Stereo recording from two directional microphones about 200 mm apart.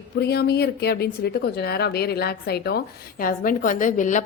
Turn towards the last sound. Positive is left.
turn(degrees=40)  # may be behind; listen again after turning